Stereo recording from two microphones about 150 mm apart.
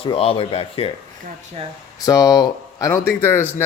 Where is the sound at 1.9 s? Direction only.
25° left (ahead or behind).